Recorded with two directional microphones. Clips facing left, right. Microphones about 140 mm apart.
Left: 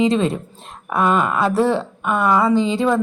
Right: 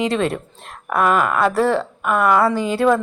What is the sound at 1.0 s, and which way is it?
Speech, 30° left (ahead or behind).